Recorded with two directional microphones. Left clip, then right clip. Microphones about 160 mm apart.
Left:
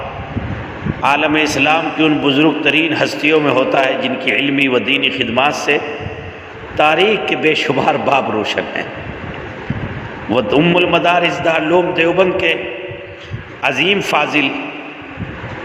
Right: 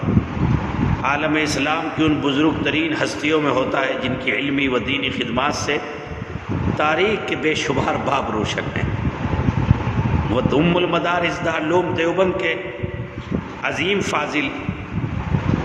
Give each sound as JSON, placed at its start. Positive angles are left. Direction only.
{"t": 1.0, "sound": "a man's voice", "side_deg": 25}
{"t": 10.3, "sound": "a man's voice", "side_deg": 20}
{"t": 13.6, "sound": "a man's voice", "side_deg": 30}